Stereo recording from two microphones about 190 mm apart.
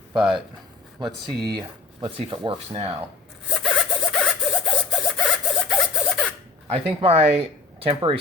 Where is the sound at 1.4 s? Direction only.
20° right (ahead or behind).